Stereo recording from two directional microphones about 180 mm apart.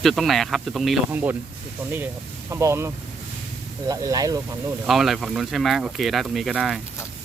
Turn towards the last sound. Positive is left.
turn(degrees=0)  # may be behind; listen again after turning